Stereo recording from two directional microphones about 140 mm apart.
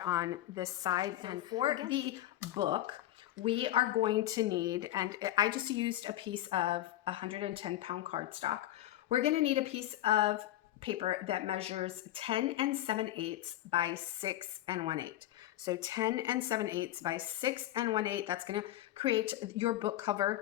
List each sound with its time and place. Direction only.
0.0 s a woman's voice: 25° right (ahead or behind)